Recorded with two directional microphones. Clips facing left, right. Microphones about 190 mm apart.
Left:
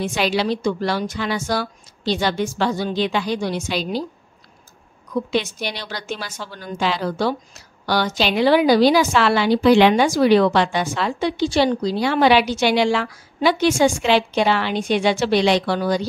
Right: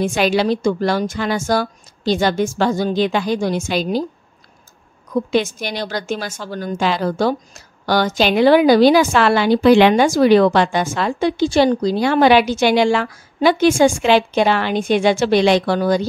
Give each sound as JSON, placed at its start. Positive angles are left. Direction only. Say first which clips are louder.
{"t": 0.0, "sound": "a woman's voice", "louder": "right 4 dB", "side_deg": -50}
{"t": 5.1, "sound": "a woman's voice", "louder": "right 4 dB", "side_deg": -50}